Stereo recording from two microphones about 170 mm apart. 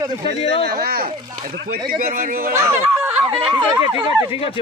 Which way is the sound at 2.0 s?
55° right (ahead or behind).